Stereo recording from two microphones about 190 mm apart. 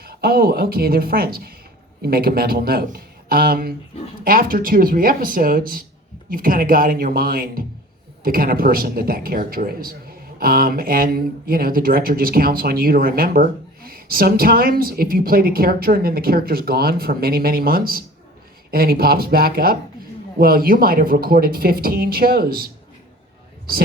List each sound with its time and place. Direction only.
0.0 s speech: 55° right (ahead or behind)